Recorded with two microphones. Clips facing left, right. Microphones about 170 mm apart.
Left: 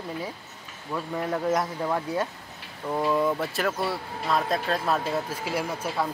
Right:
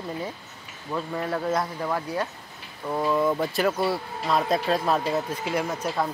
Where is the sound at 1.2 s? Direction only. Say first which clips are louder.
Left 2 dB; 15° left (ahead or behind).